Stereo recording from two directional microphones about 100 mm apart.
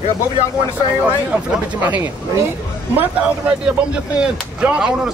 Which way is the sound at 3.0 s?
15° right (ahead or behind).